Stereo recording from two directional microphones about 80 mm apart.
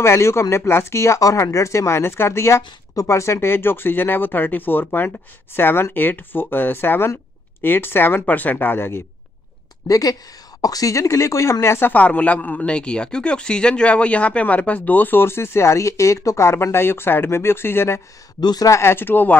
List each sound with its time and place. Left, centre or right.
0.0 s speech: left
9.8 s speech: left
11.9 s speech: centre
18.4 s speech: left
18.7 s speech: left